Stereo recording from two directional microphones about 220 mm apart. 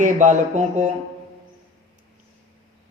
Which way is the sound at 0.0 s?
35° right (ahead or behind).